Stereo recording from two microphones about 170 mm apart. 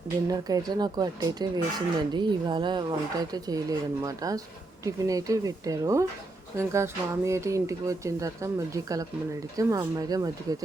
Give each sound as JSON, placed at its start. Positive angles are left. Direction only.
{"t": 0.3, "sound": "speech", "side_deg": -20}